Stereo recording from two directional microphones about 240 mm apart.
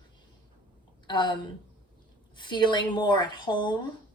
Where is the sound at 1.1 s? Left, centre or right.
Centre.